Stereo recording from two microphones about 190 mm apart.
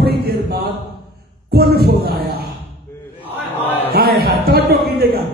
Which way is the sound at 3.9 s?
55° right (ahead or behind).